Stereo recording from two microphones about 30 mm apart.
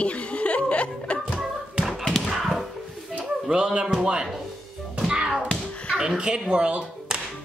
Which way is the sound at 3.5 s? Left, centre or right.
Right.